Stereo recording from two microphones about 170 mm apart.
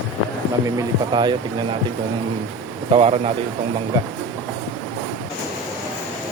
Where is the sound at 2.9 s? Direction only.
35° right (ahead or behind).